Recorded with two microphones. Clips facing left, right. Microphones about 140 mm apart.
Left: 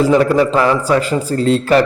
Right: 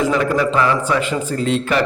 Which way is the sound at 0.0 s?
30° left (ahead or behind).